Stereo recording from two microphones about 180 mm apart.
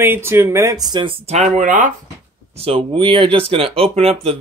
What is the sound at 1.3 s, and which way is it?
Speech, 40° right (ahead or behind).